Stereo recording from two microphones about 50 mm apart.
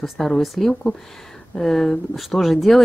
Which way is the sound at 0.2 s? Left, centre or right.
Centre.